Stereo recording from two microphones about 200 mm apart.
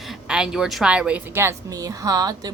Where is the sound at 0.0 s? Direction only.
5° right (ahead or behind).